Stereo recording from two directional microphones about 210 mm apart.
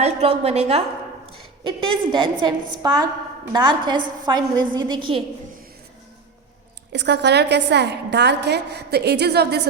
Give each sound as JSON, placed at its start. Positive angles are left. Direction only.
{"t": 0.0, "sound": "a woman's voice", "side_deg": -30}
{"t": 6.9, "sound": "a woman's voice", "side_deg": -55}